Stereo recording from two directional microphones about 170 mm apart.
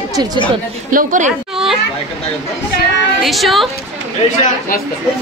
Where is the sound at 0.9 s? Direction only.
50° right (ahead or behind).